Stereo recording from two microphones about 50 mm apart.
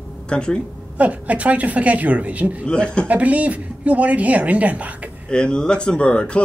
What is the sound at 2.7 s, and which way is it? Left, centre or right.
Speech, centre.